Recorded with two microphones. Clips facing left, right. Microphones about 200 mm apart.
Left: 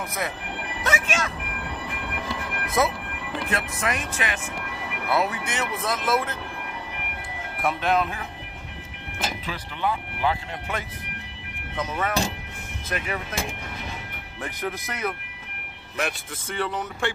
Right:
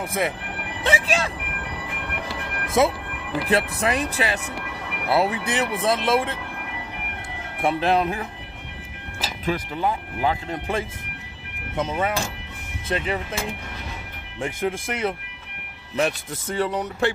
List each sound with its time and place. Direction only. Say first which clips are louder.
0.8 s speech: right 4 dB; 30° right (ahead or behind)
2.8 s speech: right 4 dB; 25° right (ahead or behind)
7.6 s speech: right 3 dB; 35° right (ahead or behind)
9.5 s speech: right 6 dB; 40° right (ahead or behind)
11.7 s speech: right 2 dB; 25° right (ahead or behind)
14.4 s speech: right 5 dB; 25° right (ahead or behind)
16.0 s speech: right 6 dB; 40° right (ahead or behind)